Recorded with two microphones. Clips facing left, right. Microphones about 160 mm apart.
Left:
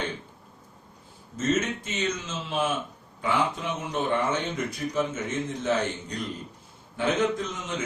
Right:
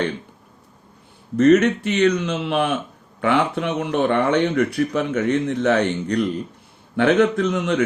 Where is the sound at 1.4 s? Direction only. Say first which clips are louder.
Right 12 dB; 65° right (ahead or behind).